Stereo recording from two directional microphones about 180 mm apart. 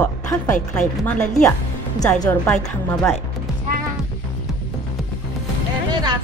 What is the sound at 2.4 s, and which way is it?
Speech, 10° left (ahead or behind).